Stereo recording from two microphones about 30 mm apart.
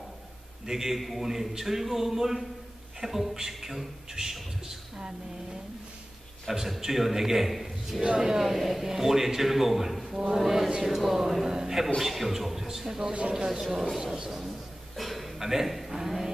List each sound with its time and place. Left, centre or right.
0.7 s a man's voice: centre
0.9 s a man's voice: centre; by 5.6 s right
6.5 s a man's voice: centre
8.2 s a man's voice: centre
12.0 s a man's voice: centre
15.0 s a sound: centre
15.4 s a man's voice: centre